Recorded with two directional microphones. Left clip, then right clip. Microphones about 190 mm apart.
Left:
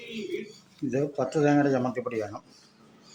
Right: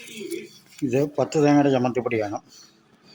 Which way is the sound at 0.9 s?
25° right (ahead or behind).